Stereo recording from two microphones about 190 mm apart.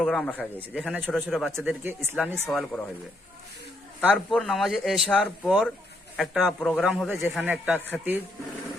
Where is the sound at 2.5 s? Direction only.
Centre (ahead or behind).